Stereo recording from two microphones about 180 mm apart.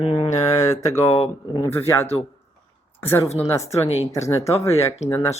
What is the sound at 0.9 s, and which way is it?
Speech, 35° left (ahead or behind).